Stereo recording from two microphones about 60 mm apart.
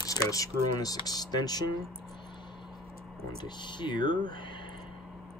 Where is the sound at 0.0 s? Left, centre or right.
Left.